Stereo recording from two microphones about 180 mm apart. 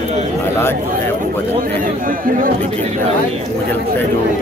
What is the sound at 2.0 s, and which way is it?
Speech, 50° right (ahead or behind).